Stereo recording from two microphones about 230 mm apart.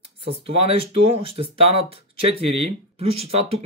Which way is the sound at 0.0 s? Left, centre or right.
Right.